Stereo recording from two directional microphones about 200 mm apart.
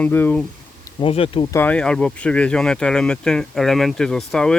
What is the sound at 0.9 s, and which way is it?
Speech, 25° left (ahead or behind).